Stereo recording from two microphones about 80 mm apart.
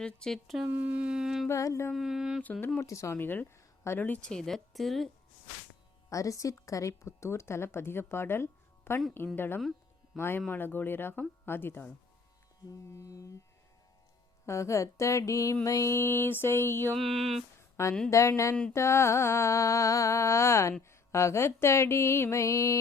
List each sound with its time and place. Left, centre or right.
0.0 s speech: centre
0.7 s music: right
1.5 s speech: left
1.9 s speech: centre
2.4 s speech: left
2.8 s speech: left
3.2 s speech: left
4.3 s speech: centre
6.1 s speech: left
13.0 s music: left
14.4 s speech: left
16.9 s speech: centre
17.8 s speech: left